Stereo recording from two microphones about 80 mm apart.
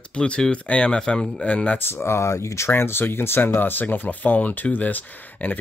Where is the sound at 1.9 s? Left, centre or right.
Left.